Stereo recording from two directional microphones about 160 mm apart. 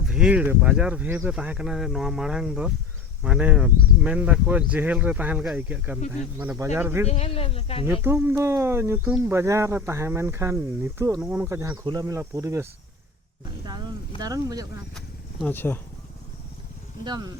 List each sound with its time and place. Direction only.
0.1 s speech: 5° right (ahead or behind)
7.1 s speech: 40° left (ahead or behind)
8.0 s speech: 15° right (ahead or behind)
13.7 s speech: 25° right (ahead or behind)
14.9 s a sound: centre (ahead or behind)
15.5 s speech: 15° left (ahead or behind)
17.0 s speech: 25° right (ahead or behind)